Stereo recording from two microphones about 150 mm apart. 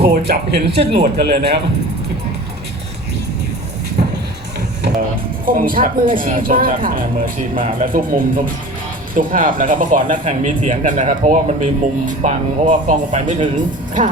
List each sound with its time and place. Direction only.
0.0 s speech: 90° right
4.9 s music: 90° right
5.5 s speech: 70° right (ahead or behind)